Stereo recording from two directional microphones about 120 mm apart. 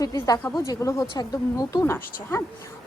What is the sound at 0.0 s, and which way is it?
A woman's voice, 30° left (ahead or behind).